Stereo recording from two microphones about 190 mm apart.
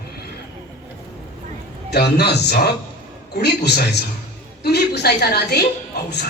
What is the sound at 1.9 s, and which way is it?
A man's voice, 60° left (ahead or behind).